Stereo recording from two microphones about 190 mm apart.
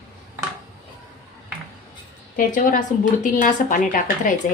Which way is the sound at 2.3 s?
45° left (ahead or behind).